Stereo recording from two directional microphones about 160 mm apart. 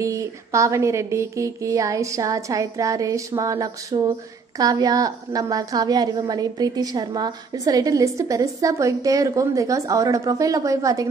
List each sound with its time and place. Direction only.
0.0 s a woman's voice: 20° right (ahead or behind)